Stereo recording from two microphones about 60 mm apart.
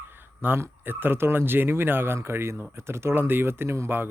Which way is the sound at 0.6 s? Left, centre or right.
Right.